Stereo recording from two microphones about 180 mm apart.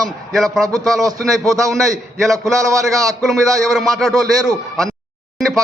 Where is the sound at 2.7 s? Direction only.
20° right (ahead or behind).